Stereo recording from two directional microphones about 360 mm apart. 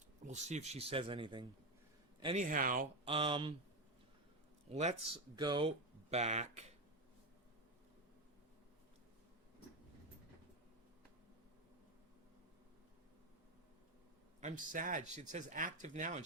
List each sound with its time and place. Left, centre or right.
0.3 s speech: centre
4.7 s speech: centre
14.4 s speech: right